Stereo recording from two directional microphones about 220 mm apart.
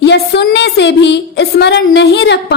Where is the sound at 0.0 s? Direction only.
50° left (ahead or behind).